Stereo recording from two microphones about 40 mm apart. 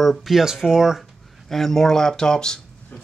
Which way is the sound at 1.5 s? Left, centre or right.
Centre.